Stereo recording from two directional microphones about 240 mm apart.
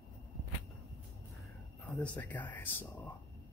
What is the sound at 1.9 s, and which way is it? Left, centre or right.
Speech, centre.